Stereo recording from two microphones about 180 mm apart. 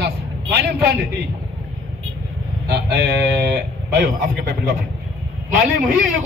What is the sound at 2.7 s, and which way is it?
A man's voice, 65° right (ahead or behind).